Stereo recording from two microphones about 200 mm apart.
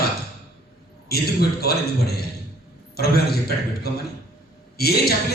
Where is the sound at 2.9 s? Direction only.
50° left (ahead or behind).